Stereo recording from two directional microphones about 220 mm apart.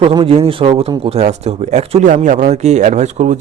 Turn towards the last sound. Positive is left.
turn(degrees=-30)  # may be behind; listen again after turning